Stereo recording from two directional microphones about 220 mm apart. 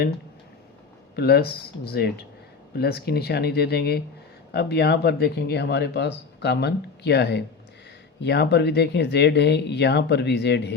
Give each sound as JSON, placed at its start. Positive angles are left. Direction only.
{"t": 1.1, "sound": "speech", "side_deg": 45}